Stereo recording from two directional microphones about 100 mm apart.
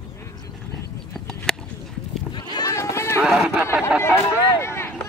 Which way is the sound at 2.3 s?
45° left (ahead or behind).